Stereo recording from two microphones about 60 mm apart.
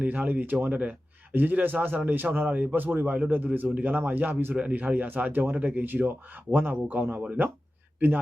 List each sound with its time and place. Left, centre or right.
0.0 s a man's voice: right